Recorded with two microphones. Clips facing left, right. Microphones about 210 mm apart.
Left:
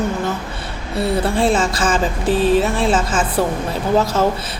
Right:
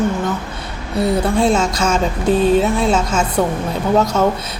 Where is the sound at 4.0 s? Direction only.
30° left (ahead or behind).